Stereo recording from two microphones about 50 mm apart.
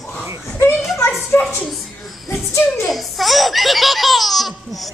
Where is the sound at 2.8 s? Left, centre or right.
Centre.